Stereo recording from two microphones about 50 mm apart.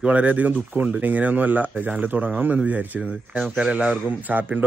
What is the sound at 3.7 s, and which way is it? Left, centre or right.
Speech, right.